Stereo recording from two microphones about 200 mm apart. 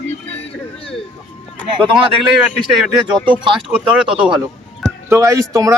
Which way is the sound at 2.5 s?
Centre (ahead or behind).